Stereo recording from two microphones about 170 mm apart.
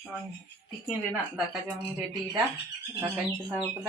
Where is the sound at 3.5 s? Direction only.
10° right (ahead or behind).